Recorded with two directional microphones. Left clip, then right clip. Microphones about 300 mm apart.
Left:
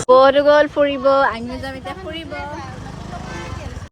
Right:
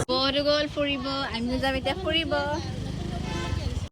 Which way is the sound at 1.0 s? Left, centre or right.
Centre.